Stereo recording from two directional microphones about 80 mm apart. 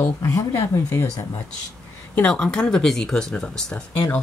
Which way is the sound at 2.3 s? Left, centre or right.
Centre.